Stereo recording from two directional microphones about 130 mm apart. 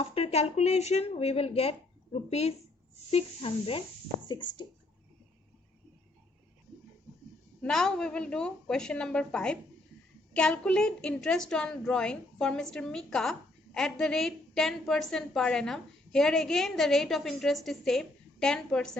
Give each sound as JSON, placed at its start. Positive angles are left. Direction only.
{"t": 0.0, "sound": "speech", "side_deg": 50}
{"t": 3.1, "sound": "speech", "side_deg": 50}
{"t": 4.3, "sound": "speech", "side_deg": 35}
{"t": 7.6, "sound": "a woman's voice", "side_deg": 5}